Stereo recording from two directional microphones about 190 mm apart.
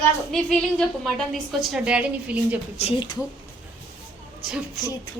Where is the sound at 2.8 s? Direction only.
25° left (ahead or behind).